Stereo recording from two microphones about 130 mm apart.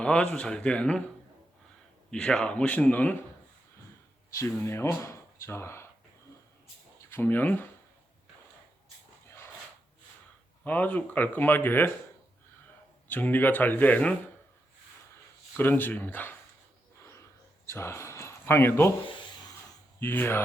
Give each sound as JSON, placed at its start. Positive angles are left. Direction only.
{"t": 0.0, "sound": "speech", "side_deg": 10}
{"t": 2.0, "sound": "speech", "side_deg": 5}
{"t": 4.3, "sound": "speech", "side_deg": 20}
{"t": 7.1, "sound": "speech", "side_deg": 15}
{"t": 10.6, "sound": "speech", "side_deg": 10}
{"t": 13.1, "sound": "speech", "side_deg": 15}
{"t": 15.5, "sound": "speech", "side_deg": 15}
{"t": 17.0, "sound": "a sound", "side_deg": 20}
{"t": 17.7, "sound": "speech", "side_deg": 20}
{"t": 20.0, "sound": "speech", "side_deg": 15}